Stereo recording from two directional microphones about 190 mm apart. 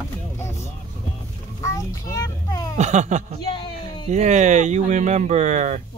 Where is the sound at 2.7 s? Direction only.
35° right (ahead or behind).